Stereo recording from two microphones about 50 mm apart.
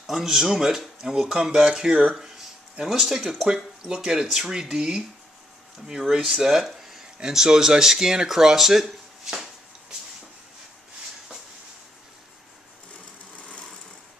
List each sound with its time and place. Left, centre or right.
0.0 s speech: centre
13.4 s lawn mower: left